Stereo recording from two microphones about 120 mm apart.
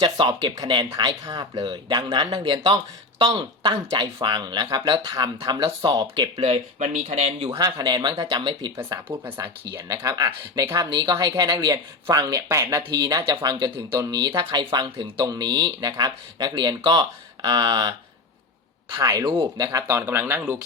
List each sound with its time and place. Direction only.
0.2 s speech: 35° right (ahead or behind)
6.3 s speech: 60° right (ahead or behind)
7.5 s speech: 30° right (ahead or behind)
9.0 s speech: 20° right (ahead or behind)
19.9 s speech: 20° right (ahead or behind)